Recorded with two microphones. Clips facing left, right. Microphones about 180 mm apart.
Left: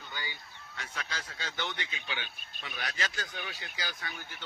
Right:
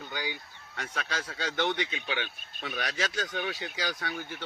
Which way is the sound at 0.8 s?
75° right (ahead or behind).